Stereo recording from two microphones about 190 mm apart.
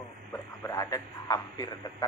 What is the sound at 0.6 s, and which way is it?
A man's voice, 15° left (ahead or behind).